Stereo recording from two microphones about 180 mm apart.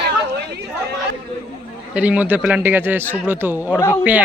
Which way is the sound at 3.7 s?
15° left (ahead or behind).